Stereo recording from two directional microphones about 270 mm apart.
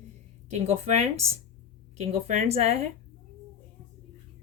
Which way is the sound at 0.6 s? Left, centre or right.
Right.